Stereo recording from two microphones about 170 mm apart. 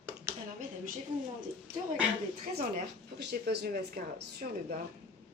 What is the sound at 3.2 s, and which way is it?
Speech, 70° right (ahead or behind).